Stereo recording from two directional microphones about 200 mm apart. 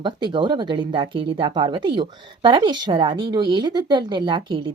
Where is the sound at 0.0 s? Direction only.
25° right (ahead or behind).